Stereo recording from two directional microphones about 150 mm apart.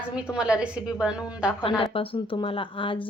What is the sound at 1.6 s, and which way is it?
Speech, 35° left (ahead or behind).